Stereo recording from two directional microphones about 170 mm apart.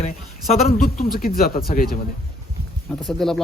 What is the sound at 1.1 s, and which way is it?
Speech, 60° left (ahead or behind).